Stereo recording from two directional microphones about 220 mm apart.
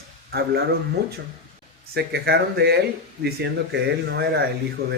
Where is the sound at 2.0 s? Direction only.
45° right (ahead or behind).